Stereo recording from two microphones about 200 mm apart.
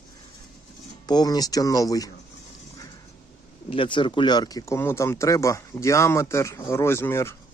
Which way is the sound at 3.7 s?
25° left (ahead or behind).